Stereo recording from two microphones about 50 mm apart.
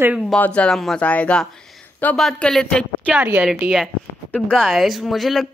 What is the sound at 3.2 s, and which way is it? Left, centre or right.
Speech, right.